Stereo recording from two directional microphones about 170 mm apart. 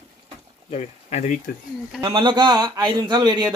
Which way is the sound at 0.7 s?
40° left (ahead or behind).